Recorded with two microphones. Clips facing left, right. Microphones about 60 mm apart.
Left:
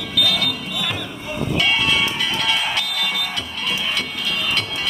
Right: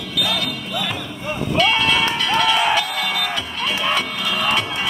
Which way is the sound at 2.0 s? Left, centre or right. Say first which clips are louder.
Right 4 dB; right.